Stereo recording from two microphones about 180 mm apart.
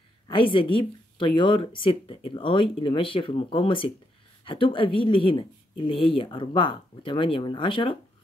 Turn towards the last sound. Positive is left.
turn(degrees=30)  # may be behind; listen again after turning